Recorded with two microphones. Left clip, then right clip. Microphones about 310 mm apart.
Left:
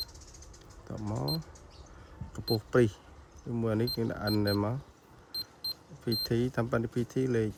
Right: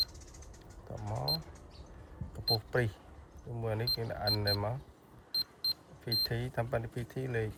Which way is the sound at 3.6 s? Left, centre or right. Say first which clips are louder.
Left 3 dB; left.